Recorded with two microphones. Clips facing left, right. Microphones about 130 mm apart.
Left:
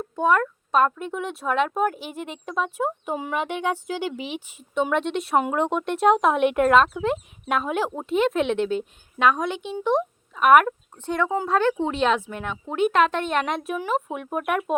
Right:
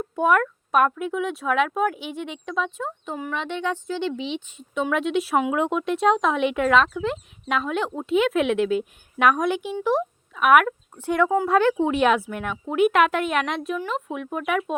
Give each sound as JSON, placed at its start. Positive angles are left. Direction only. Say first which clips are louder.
{"t": 0.0, "sound": "a sound", "louder": "right 1 dB", "side_deg": -10}
{"t": 0.9, "sound": "speech", "louder": "right 4 dB", "side_deg": -5}
{"t": 8.4, "sound": "a woman's voice", "louder": "right 2 dB", "side_deg": 30}
{"t": 8.7, "sound": "speech", "louder": "right 2 dB", "side_deg": -10}